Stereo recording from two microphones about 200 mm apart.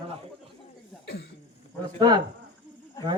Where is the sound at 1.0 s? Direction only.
60° left (ahead or behind).